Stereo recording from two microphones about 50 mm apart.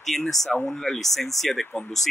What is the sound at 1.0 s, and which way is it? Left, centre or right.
Speech, centre.